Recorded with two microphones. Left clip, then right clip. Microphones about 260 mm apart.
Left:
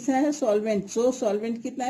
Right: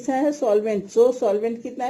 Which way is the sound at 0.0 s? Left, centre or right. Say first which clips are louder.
Right 3 dB; left.